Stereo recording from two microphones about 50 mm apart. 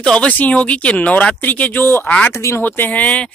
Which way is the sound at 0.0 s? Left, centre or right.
Left.